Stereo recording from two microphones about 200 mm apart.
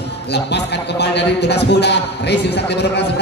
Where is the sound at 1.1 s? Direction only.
55° left (ahead or behind).